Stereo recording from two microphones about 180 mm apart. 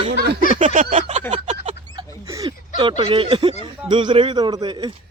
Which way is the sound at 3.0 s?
30° right (ahead or behind).